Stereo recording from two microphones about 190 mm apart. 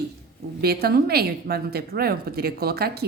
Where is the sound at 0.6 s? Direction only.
55° right (ahead or behind).